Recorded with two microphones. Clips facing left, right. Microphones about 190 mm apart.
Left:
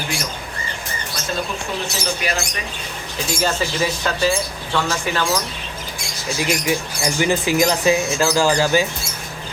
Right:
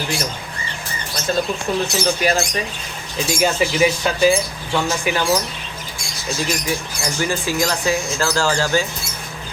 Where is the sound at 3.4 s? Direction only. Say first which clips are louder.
Right 5 dB; 15° right (ahead or behind).